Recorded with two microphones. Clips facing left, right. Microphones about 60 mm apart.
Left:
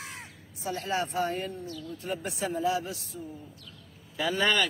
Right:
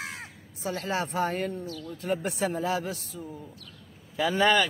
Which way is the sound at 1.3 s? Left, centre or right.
Right.